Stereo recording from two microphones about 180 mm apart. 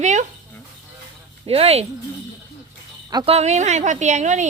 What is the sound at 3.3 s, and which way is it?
A woman's voice, 40° right (ahead or behind).